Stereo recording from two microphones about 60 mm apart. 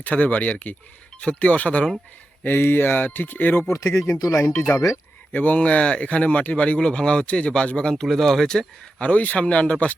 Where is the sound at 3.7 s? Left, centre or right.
Left.